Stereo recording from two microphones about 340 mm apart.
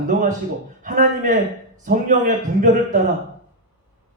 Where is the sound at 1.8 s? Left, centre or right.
Right.